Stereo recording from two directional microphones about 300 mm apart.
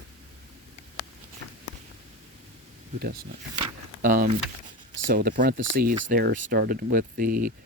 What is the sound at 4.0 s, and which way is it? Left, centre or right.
Speech, right.